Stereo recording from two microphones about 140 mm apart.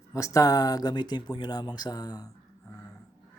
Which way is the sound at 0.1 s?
25° left (ahead or behind).